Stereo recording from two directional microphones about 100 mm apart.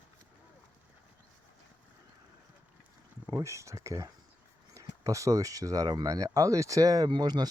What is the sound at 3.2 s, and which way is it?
Speech, 30° right (ahead or behind).